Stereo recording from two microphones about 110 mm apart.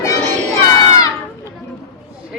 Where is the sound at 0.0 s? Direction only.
30° left (ahead or behind).